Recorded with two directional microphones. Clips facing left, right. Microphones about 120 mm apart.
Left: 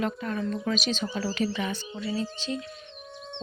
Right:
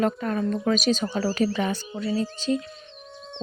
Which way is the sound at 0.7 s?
45° right (ahead or behind).